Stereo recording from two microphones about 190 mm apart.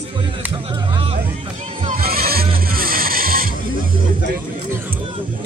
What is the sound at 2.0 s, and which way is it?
Vehicle, 55° right (ahead or behind).